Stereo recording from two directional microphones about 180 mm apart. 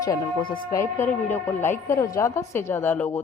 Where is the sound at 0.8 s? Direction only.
10° left (ahead or behind).